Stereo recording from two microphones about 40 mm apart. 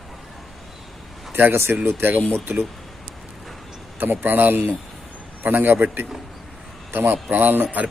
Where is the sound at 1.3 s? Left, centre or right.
Right.